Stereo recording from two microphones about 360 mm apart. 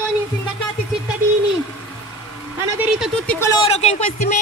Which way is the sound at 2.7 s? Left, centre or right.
Centre.